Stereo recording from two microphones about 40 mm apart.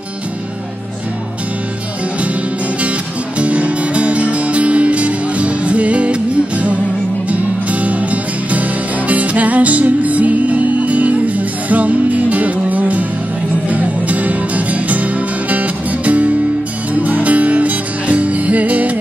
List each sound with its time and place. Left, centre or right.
3.3 s music: right